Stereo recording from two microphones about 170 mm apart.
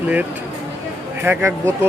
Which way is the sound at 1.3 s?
15° right (ahead or behind).